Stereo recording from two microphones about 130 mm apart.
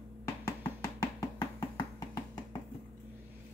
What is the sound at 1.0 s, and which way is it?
Music, 25° left (ahead or behind).